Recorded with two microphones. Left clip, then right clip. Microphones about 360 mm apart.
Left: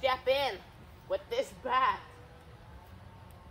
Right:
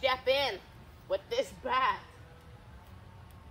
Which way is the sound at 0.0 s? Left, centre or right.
Centre.